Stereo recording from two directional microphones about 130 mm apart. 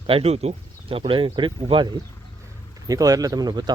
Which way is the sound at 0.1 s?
50° right (ahead or behind).